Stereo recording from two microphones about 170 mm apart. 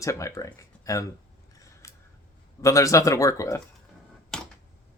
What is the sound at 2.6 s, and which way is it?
Speech, 20° left (ahead or behind).